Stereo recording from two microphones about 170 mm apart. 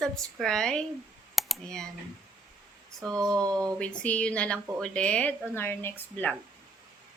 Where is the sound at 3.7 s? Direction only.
5° left (ahead or behind).